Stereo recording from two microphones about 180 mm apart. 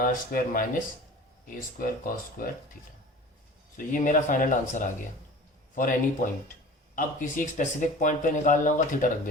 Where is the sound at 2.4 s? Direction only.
50° left (ahead or behind).